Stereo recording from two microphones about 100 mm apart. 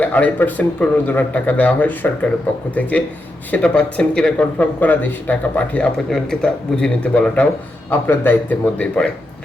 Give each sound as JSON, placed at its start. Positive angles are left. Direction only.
{"t": 0.0, "sound": "speech", "side_deg": 15}